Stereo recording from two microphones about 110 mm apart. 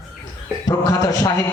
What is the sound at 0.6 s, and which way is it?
Speech, 35° left (ahead or behind).